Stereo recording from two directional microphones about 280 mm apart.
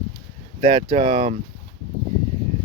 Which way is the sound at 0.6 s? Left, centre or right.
Centre.